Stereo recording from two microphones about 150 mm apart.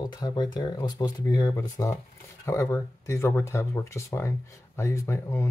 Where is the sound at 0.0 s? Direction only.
30° left (ahead or behind).